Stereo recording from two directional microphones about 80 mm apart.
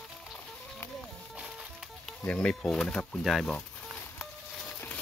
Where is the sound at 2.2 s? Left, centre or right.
Centre.